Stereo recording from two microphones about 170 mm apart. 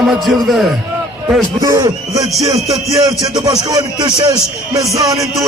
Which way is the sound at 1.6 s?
20° right (ahead or behind).